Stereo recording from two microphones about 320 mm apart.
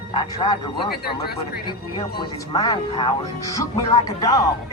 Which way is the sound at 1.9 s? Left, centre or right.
Centre.